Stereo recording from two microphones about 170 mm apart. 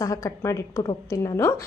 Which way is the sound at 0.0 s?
20° left (ahead or behind).